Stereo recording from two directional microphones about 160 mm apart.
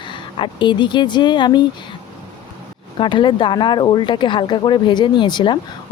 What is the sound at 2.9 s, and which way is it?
A woman's voice, 30° left (ahead or behind).